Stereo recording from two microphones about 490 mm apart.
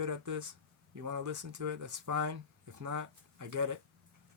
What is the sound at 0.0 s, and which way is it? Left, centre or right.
Speech, right.